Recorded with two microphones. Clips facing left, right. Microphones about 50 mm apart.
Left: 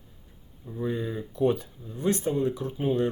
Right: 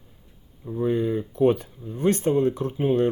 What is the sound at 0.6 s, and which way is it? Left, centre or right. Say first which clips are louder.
Speech: right 6 dB; right.